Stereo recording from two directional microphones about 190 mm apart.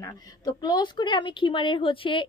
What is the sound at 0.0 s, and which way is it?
Speech, 20° left (ahead or behind).